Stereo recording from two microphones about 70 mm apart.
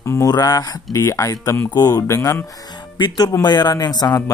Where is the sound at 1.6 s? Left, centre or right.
Left.